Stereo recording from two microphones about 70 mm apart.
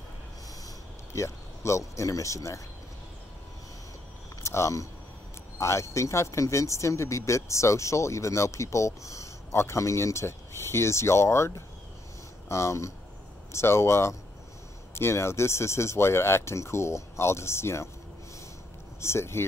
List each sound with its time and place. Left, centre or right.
1.1 s speech: left
4.4 s a sound: left
5.6 s speech: left
18.9 s speech: left